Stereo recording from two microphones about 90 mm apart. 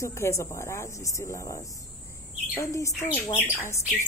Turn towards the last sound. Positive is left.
turn(degrees=30)  # may be behind; listen again after turning